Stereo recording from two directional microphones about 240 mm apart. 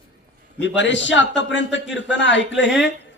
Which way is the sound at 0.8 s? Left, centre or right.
Left.